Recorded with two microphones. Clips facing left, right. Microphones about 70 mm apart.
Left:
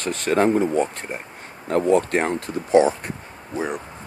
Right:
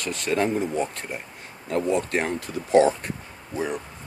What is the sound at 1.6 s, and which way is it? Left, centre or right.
Speech, left.